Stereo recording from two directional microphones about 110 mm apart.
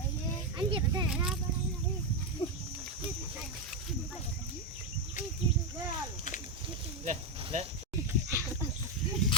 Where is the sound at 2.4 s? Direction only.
45° left (ahead or behind).